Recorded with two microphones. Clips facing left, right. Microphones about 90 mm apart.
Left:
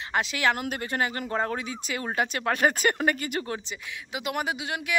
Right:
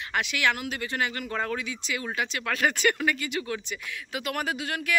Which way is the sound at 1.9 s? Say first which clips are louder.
Left 3 dB; 40° left (ahead or behind).